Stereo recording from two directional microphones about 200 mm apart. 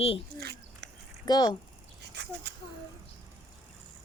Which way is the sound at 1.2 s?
20° left (ahead or behind).